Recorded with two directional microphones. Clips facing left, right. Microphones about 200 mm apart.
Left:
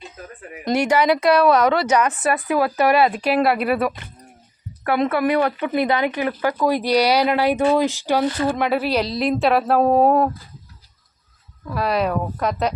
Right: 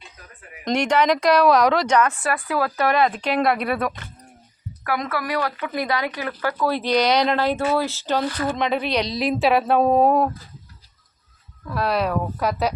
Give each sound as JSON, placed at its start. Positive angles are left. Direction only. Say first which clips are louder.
{"t": 0.6, "sound": "speech", "louder": "left 2 dB", "side_deg": 5}
{"t": 2.0, "sound": "speech", "louder": "left 1 dB", "side_deg": 20}
{"t": 4.8, "sound": "speech", "louder": "left 7 dB", "side_deg": 25}
{"t": 11.6, "sound": "speech", "louder": "left 1 dB", "side_deg": 0}